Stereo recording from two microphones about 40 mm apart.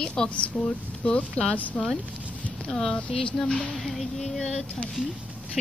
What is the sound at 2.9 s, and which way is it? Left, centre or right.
Speech, left.